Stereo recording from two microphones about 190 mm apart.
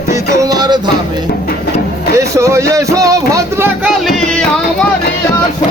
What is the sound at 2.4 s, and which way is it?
Music, 15° right (ahead or behind).